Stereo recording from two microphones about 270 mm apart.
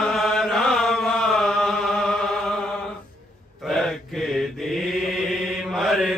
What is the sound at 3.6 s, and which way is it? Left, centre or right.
Mantra, centre.